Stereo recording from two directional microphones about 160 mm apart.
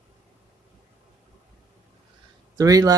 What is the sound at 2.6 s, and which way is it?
Speech, 20° right (ahead or behind).